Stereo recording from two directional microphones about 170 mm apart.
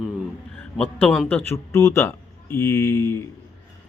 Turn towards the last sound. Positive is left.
turn(degrees=15)  # may be behind; listen again after turning